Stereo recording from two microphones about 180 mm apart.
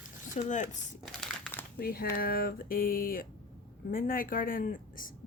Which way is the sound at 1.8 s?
55° left (ahead or behind).